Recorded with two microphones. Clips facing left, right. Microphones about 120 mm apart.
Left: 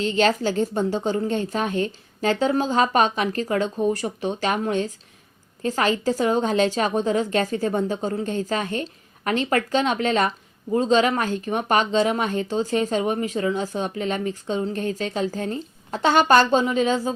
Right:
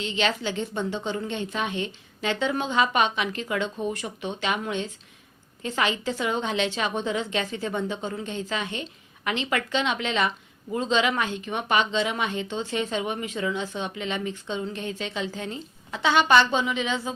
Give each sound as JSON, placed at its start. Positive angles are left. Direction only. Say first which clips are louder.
{"t": 0.0, "sound": "a woman's voice", "louder": "left 6 dB", "side_deg": 40}